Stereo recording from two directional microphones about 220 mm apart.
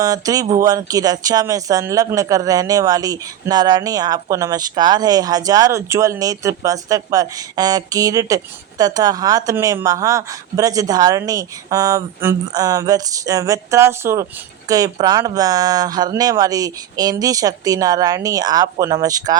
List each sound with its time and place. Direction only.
0.0 s speech: 15° right (ahead or behind)